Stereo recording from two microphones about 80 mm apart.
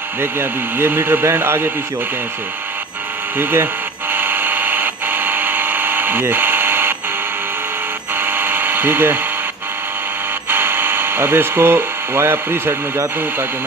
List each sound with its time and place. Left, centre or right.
0.2 s speech: right
3.3 s speech: right
4.1 s buzzer: right
8.2 s electric toothbrush: right
10.5 s speech: right